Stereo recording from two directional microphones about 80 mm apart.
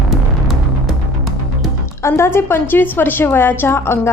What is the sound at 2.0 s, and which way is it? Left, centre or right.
Speech, left.